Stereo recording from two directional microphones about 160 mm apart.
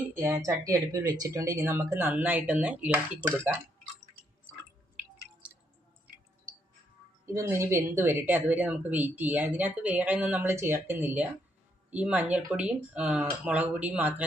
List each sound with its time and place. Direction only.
0.1 s speech: 15° right (ahead or behind)
7.3 s speech: 15° right (ahead or behind)